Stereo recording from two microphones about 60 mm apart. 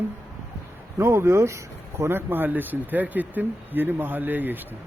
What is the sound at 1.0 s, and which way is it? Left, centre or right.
Speech, right.